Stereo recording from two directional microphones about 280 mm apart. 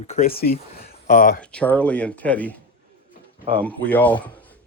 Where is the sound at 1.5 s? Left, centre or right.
Centre.